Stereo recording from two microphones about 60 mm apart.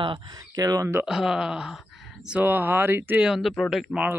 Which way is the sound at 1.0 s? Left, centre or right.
Centre.